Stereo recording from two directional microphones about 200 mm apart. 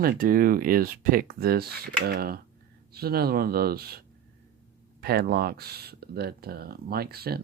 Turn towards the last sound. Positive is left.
turn(degrees=-50)  # may be behind; listen again after turning